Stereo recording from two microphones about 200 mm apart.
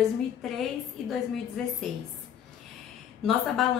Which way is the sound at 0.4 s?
Centre (ahead or behind).